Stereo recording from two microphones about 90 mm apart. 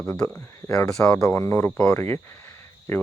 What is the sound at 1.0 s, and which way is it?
Speech, 25° left (ahead or behind).